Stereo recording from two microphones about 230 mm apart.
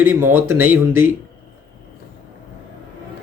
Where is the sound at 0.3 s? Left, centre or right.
Right.